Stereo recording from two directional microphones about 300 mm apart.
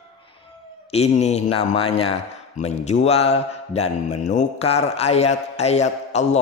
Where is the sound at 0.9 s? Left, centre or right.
Left.